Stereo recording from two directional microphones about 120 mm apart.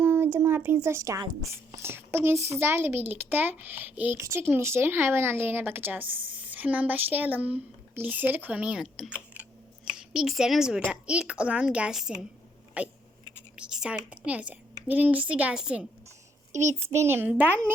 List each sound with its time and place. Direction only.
0.0 s speech: 15° right (ahead or behind)
16.5 s a child's voice: 25° right (ahead or behind)